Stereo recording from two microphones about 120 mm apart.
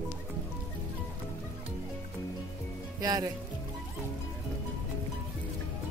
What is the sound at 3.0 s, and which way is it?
Music, 30° right (ahead or behind).